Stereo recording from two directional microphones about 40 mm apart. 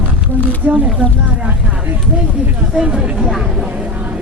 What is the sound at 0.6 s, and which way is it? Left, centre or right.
Speech, right.